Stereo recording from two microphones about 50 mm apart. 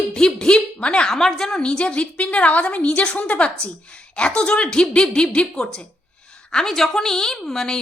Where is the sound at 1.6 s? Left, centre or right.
Centre.